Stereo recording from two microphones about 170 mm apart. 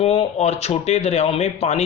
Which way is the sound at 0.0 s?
35° left (ahead or behind).